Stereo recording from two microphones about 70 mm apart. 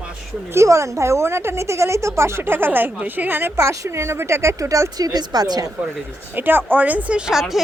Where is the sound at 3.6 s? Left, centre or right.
Right.